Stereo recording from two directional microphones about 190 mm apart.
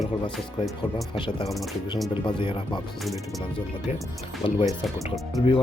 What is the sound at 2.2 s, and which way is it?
Speech, 25° left (ahead or behind).